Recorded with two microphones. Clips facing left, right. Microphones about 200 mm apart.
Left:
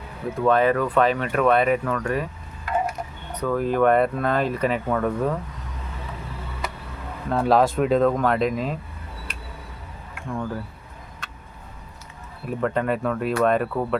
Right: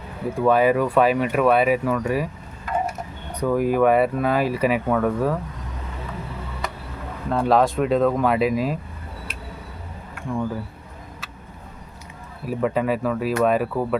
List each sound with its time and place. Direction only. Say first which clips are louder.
0.3 s speech: right 2 dB; 10° right (ahead or behind)
3.3 s speech: right 2 dB; 10° right (ahead or behind)
7.3 s speech: even; centre (ahead or behind)
10.3 s speech: right 3 dB; 10° right (ahead or behind)
11.2 s turkey: even; 5° right (ahead or behind)
12.5 s speech: right 2 dB; 5° right (ahead or behind)